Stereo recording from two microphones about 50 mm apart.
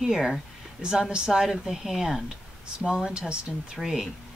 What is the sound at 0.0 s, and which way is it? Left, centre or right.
A woman's voice, centre.